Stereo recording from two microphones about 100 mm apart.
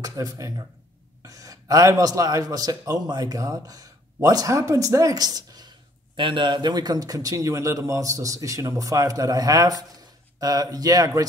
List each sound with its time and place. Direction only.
0.0 s a man's voice: 35° right (ahead or behind)